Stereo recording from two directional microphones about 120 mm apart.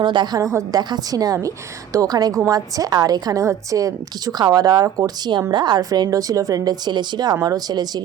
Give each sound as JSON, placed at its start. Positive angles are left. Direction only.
{"t": 0.0, "sound": "a woman's voice", "side_deg": -40}